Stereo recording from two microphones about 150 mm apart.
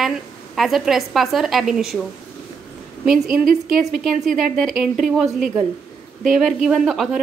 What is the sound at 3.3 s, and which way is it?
Speech, 70° right (ahead or behind).